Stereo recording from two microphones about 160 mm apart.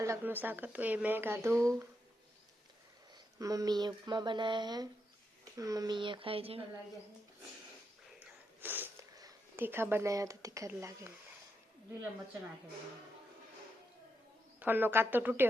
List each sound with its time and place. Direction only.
0.0 s speech: 15° right (ahead or behind)
3.3 s speech: 20° right (ahead or behind); by 6.7 s 35° right (ahead or behind)
8.6 s a sound: 10° right (ahead or behind)
10.7 s speech: 15° right (ahead or behind)
14.6 s speech: 10° right (ahead or behind)